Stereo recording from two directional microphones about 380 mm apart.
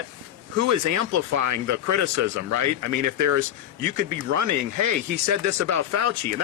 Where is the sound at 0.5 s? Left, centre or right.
Right.